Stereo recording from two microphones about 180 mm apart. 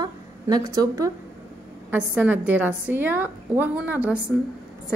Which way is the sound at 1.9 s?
10° right (ahead or behind).